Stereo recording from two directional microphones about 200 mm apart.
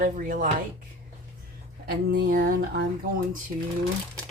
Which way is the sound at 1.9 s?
55° right (ahead or behind).